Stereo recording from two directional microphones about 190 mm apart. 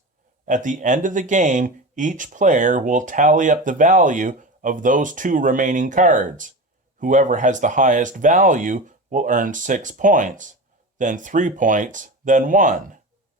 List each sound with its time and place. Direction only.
0.4 s speech: 40° right (ahead or behind)